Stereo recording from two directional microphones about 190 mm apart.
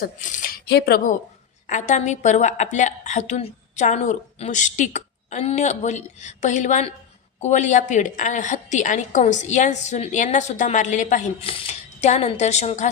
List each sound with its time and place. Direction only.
0.0 s speech: 40° left (ahead or behind)
1.6 s a woman's voice: 40° left (ahead or behind)
11.4 s a woman's voice: 30° left (ahead or behind)